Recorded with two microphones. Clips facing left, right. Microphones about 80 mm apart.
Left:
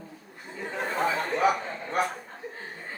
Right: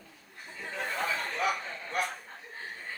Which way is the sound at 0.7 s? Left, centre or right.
Left.